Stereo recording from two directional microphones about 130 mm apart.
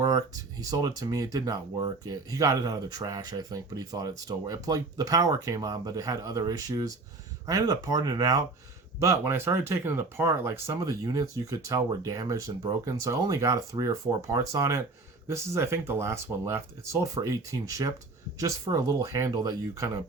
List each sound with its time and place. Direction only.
0.0 s speech: 25° right (ahead or behind)